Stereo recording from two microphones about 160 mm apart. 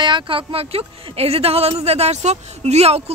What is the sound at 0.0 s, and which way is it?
A woman's voice, 30° right (ahead or behind).